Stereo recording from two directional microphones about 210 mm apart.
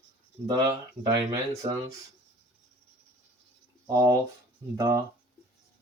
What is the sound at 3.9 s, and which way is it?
Speech, 15° right (ahead or behind).